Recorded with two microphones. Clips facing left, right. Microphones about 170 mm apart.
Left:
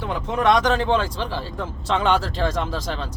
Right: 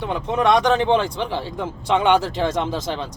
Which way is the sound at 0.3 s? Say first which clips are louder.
Right 2 dB; 20° right (ahead or behind).